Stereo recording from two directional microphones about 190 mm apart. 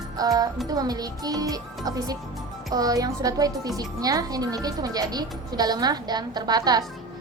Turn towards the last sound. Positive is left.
turn(degrees=-20)  # may be behind; listen again after turning